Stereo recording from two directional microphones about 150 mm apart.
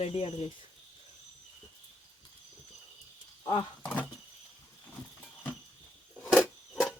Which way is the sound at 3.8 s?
10° left (ahead or behind).